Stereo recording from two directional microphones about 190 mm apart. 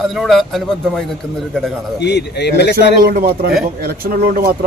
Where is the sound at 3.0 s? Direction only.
50° right (ahead or behind).